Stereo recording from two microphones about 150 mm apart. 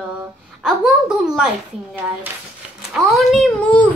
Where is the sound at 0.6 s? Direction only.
5° right (ahead or behind).